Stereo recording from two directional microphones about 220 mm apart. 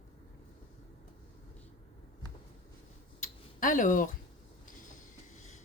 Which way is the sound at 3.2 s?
35° left (ahead or behind).